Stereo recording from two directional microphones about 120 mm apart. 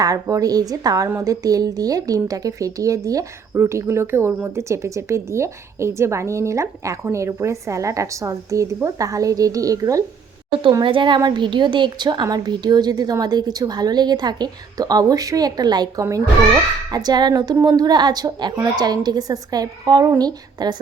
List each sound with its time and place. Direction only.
0.0 s speech: 30° right (ahead or behind)
10.6 s a woman's voice: 40° right (ahead or behind)